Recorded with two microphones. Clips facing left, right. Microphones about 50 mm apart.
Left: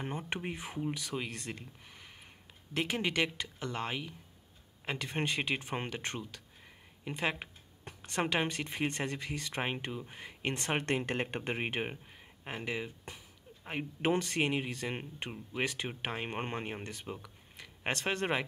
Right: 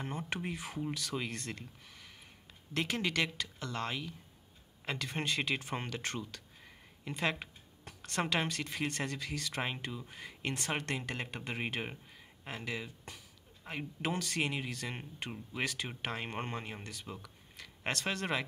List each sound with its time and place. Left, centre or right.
0.3 s speech: left
1.9 s a sound: left
2.7 s speech: centre